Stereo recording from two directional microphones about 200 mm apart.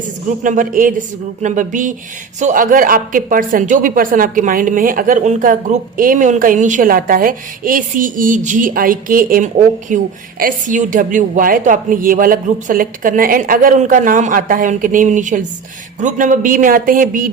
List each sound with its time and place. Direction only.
0.4 s a woman's voice: 40° right (ahead or behind)